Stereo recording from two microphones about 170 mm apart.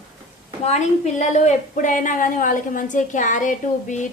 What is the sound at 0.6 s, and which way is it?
Speech, 40° left (ahead or behind).